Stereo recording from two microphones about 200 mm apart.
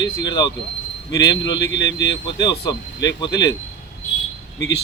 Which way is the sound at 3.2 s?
20° left (ahead or behind).